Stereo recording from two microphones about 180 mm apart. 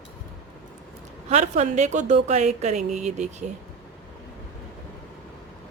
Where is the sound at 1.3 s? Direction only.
40° right (ahead or behind).